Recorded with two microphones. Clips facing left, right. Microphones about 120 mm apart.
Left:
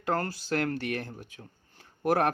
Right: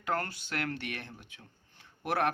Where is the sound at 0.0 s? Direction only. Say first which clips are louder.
Left 4 dB; 35° left (ahead or behind).